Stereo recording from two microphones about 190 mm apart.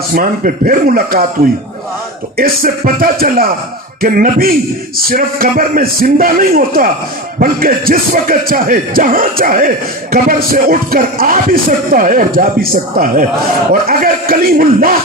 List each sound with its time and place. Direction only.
0.1 s speech: 45° right (ahead or behind)
2.4 s speech: 50° right (ahead or behind)